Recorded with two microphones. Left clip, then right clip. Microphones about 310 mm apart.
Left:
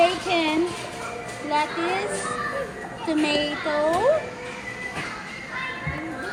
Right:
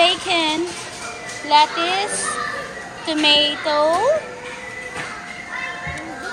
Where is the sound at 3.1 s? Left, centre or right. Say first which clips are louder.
Right 8 dB; centre.